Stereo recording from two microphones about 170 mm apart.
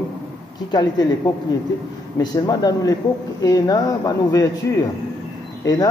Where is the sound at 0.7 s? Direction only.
25° left (ahead or behind).